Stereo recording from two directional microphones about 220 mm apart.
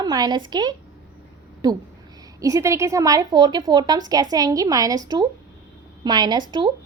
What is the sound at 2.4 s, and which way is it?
A woman's voice, 15° right (ahead or behind).